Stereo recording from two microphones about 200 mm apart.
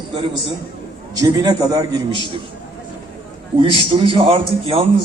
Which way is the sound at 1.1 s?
20° right (ahead or behind).